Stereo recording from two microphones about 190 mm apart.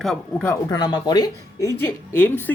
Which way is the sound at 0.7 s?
20° left (ahead or behind).